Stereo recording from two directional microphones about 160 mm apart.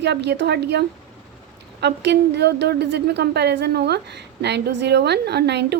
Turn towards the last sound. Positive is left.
turn(degrees=-90)